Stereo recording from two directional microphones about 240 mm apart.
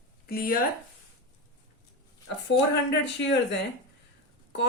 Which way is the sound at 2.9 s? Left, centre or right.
Left.